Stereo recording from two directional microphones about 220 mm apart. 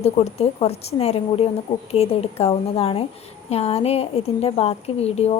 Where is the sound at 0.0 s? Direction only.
30° left (ahead or behind).